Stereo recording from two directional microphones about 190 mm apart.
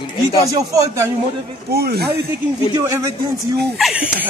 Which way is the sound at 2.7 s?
15° right (ahead or behind).